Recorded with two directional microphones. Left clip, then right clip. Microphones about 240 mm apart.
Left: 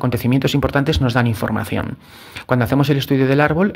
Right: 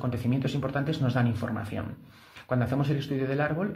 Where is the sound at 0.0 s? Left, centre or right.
Left.